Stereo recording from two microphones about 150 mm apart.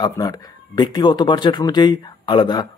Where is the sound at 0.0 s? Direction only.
25° left (ahead or behind).